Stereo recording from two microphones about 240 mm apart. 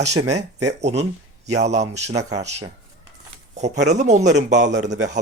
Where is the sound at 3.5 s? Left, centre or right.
Right.